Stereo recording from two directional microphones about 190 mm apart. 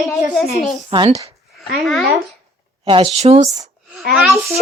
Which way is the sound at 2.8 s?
30° right (ahead or behind).